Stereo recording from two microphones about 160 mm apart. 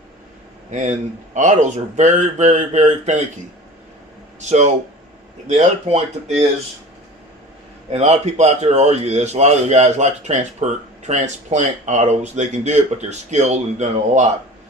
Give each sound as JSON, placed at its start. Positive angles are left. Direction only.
{"t": 0.7, "sound": "a man's voice", "side_deg": -50}
{"t": 4.4, "sound": "a man's voice", "side_deg": -45}
{"t": 7.9, "sound": "a man's voice", "side_deg": -40}